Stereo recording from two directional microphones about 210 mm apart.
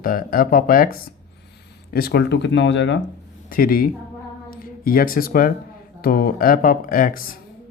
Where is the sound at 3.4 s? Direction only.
45° left (ahead or behind).